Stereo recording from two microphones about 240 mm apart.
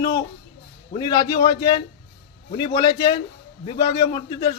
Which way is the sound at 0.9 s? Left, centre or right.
Centre.